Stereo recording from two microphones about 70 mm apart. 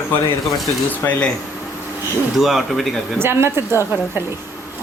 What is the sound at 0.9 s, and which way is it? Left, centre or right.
Speech, left.